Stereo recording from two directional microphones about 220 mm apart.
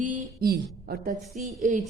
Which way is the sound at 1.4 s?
35° right (ahead or behind).